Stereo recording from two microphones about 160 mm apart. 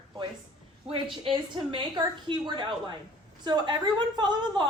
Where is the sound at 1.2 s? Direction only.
30° right (ahead or behind).